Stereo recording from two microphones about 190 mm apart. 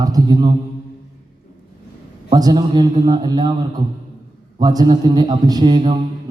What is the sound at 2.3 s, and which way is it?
A man's voice, 20° right (ahead or behind).